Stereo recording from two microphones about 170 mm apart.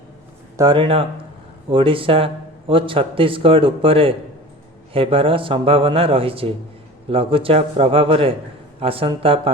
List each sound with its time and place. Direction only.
0.5 s speech: 25° right (ahead or behind)